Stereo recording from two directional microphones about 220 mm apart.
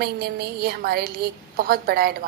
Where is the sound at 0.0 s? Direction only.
45° right (ahead or behind).